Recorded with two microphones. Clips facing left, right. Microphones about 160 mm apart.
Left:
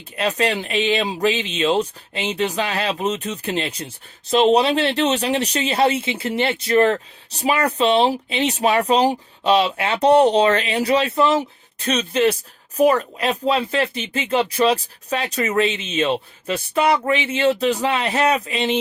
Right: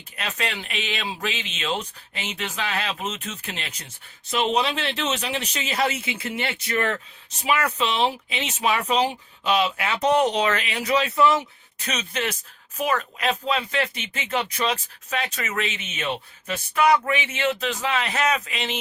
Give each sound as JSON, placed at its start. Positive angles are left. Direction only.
{"t": 0.2, "sound": "speech", "side_deg": 35}